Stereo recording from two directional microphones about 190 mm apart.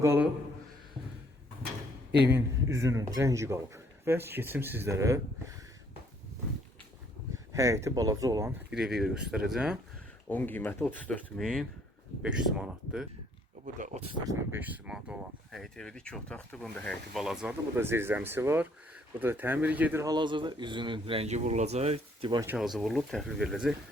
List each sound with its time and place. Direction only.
0.0 s a man's voice: 15° right (ahead or behind)
2.3 s speech: 15° right (ahead or behind)
7.5 s speech: 15° right (ahead or behind)
8.7 s speech: centre (ahead or behind)
10.2 s speech: 10° left (ahead or behind)
13.7 s speech: 40° right (ahead or behind)
14.3 s speech: 10° right (ahead or behind)
17.7 s speech: 10° right (ahead or behind)
22.4 s speech: centre (ahead or behind)